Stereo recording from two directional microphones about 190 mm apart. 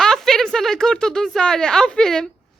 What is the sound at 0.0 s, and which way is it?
Speech, centre (ahead or behind).